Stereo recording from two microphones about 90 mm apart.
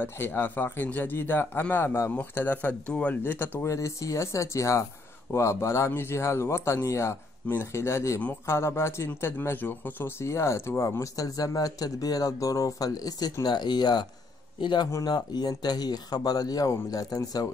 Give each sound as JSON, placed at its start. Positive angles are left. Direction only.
{"t": 0.0, "sound": "speech", "side_deg": 25}
{"t": 3.6, "sound": "speech", "side_deg": 35}
{"t": 14.9, "sound": "speech", "side_deg": 35}
{"t": 15.1, "sound": "speech", "side_deg": 50}